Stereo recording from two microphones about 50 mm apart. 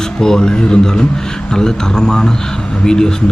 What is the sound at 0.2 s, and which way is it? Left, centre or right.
Speech, centre.